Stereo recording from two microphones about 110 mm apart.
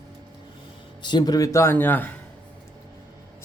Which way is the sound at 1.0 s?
40° left (ahead or behind).